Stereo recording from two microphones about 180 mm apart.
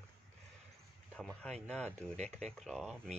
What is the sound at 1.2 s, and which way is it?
Speech, 5° left (ahead or behind).